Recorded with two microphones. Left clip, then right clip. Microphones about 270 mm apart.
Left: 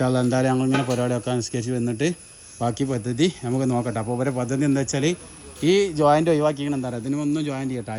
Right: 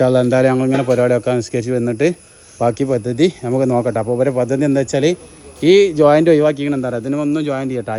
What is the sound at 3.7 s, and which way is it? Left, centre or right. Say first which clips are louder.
Speech: right 9 dB; right.